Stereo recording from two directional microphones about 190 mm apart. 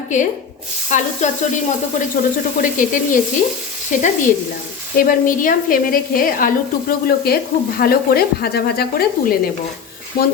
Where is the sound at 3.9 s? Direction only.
40° left (ahead or behind).